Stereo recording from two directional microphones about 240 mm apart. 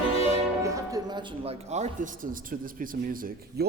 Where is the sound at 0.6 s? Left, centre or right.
Centre.